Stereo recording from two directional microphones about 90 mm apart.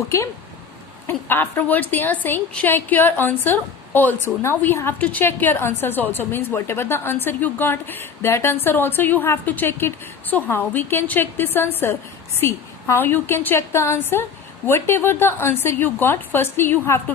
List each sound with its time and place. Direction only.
0.1 s a woman's voice: 35° left (ahead or behind)